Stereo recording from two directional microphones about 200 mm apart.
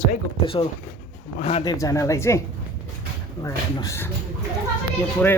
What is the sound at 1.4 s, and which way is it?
Speech, 30° left (ahead or behind).